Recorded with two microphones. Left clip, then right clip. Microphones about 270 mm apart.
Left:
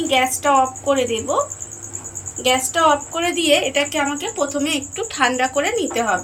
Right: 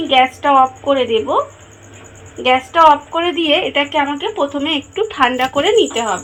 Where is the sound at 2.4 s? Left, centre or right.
Centre.